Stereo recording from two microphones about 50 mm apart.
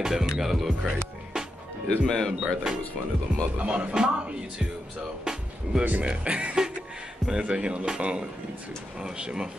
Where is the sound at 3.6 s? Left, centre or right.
Right.